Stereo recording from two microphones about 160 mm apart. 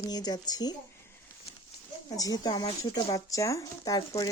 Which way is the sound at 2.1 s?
25° left (ahead or behind).